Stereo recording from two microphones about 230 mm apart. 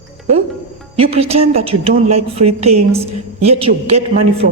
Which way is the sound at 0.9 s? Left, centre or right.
Right.